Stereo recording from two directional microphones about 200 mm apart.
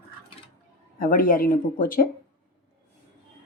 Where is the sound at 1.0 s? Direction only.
45° left (ahead or behind).